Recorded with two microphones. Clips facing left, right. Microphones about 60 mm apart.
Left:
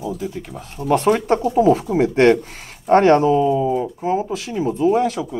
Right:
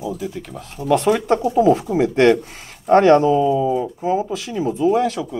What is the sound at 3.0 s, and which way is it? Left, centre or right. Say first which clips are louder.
Speech: right 1 dB; left.